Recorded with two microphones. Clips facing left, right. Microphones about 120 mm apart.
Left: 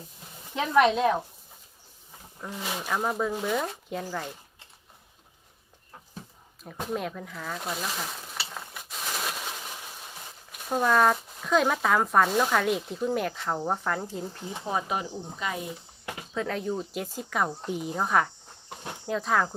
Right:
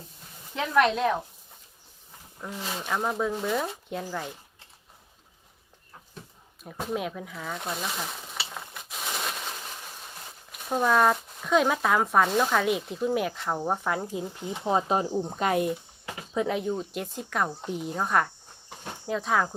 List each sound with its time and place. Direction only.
0.5 s speech: 15° left (ahead or behind)
0.8 s speech: centre (ahead or behind)
2.4 s speech: centre (ahead or behind)
6.6 s speech: 5° right (ahead or behind); by 15.0 s 30° right (ahead or behind)
15.1 s speech: 50° right (ahead or behind)
16.3 s speech: 15° right (ahead or behind)
16.6 s speech: centre (ahead or behind)